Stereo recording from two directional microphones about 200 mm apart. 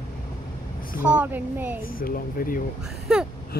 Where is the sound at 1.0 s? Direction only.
5° right (ahead or behind).